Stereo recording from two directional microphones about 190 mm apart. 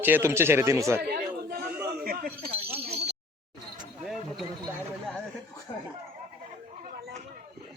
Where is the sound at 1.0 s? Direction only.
55° right (ahead or behind).